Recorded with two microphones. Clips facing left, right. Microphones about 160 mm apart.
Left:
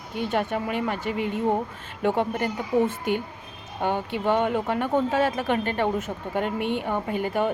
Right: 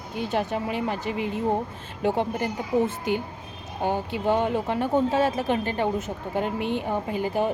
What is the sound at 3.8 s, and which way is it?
Speech, 40° right (ahead or behind).